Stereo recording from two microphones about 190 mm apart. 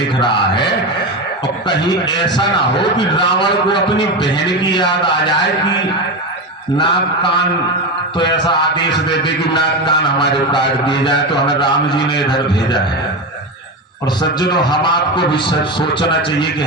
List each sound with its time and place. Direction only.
0.2 s a man's voice: 25° left (ahead or behind)
1.7 s a man's voice: 65° left (ahead or behind)
2.4 s a man's voice: 25° left (ahead or behind)
6.7 s a man's voice: 25° left (ahead or behind)
14.4 s a man's voice: 25° left (ahead or behind)